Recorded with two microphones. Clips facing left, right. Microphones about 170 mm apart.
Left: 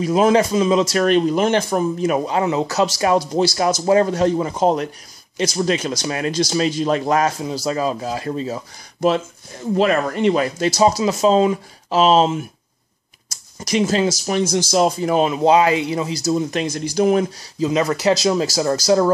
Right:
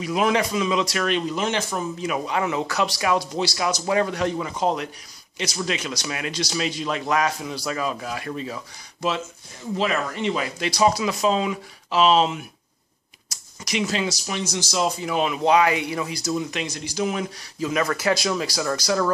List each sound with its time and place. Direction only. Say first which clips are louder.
0.0 s a man's voice: left 7 dB; 40° left (ahead or behind)
9.8 s a man's voice: left 7 dB; 50° left (ahead or behind); by 16.2 s 25° left (ahead or behind)
16.3 s speech: left 8 dB; 40° left (ahead or behind)
17.6 s a man's voice: left 5 dB; 20° left (ahead or behind)